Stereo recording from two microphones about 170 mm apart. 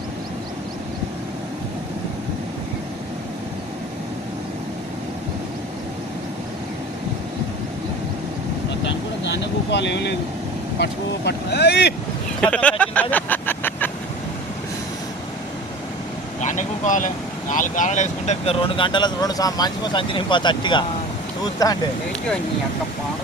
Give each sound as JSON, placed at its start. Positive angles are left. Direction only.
{"t": 8.8, "sound": "vehicle", "side_deg": 90}
{"t": 11.3, "sound": "speech", "side_deg": 75}
{"t": 12.4, "sound": "a sound", "side_deg": 5}
{"t": 16.4, "sound": "vehicle", "side_deg": 45}
{"t": 17.5, "sound": "speech", "side_deg": 50}